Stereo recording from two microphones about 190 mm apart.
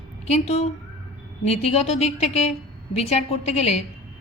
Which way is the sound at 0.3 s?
35° left (ahead or behind).